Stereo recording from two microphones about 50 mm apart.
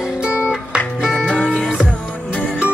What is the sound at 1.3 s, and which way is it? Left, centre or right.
Music, left.